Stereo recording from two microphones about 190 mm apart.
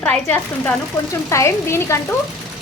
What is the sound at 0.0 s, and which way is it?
A woman's voice, 10° left (ahead or behind).